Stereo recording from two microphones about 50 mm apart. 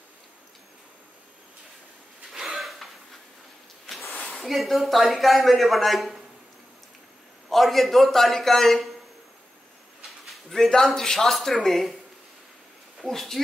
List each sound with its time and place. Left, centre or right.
2.3 s a sound: centre
3.9 s a sound: centre
4.4 s speech: centre
7.4 s speech: centre
10.2 s a man's voice: centre
13.1 s speech: centre